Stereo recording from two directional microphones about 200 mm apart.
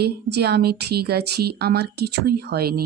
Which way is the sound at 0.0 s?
55° right (ahead or behind).